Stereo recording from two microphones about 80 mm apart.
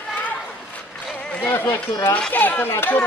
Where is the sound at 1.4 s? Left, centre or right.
Left.